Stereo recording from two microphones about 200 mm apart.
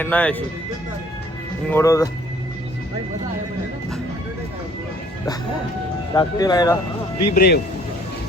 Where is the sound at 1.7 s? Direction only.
15° left (ahead or behind).